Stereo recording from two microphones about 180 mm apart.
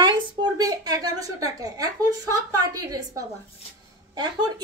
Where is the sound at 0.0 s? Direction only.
20° right (ahead or behind).